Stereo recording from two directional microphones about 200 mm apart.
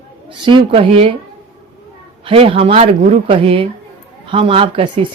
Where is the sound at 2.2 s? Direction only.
25° right (ahead or behind).